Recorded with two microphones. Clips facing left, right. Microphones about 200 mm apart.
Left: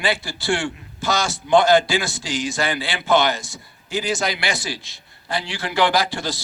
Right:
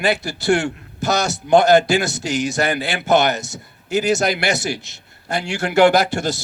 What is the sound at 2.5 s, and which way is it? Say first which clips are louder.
Speech: right 4 dB; 45° right (ahead or behind).